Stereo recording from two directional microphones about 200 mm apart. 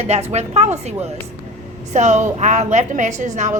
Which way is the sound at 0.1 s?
35° right (ahead or behind).